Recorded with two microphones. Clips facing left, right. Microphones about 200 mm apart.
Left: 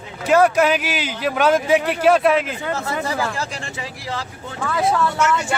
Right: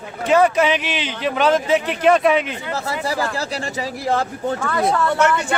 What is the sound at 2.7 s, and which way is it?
Speech, 35° right (ahead or behind).